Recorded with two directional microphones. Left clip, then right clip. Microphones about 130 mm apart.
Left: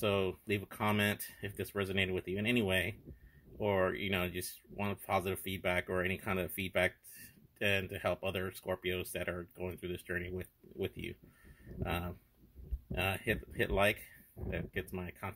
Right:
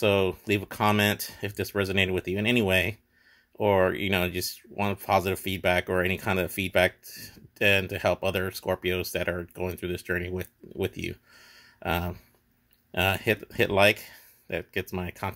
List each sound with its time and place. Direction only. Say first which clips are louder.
0.0 s speech: right 10 dB; 25° right (ahead or behind)